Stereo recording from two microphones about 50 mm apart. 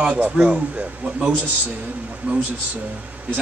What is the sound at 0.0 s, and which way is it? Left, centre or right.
A man's voice, right.